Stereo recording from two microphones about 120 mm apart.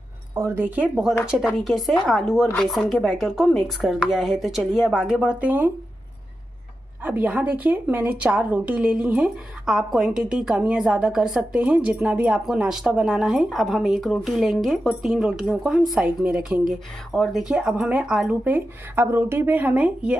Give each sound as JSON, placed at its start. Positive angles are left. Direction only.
{"t": 0.3, "sound": "a woman's voice", "side_deg": -20}
{"t": 7.0, "sound": "a woman's voice", "side_deg": -15}
{"t": 17.1, "sound": "a woman's voice", "side_deg": 0}
{"t": 18.5, "sound": "speech", "side_deg": -20}